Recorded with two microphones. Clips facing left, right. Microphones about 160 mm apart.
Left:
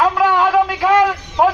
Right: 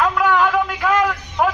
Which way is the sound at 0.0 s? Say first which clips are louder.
Left 2 dB; 30° left (ahead or behind).